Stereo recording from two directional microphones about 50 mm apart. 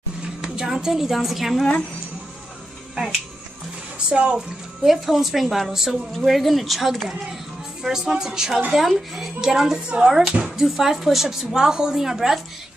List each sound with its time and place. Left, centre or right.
0.2 s a woman's voice: centre
4.1 s speech: right
4.8 s a woman's voice: centre
7.8 s speech: centre
9.8 s speech: right
10.4 s speech: centre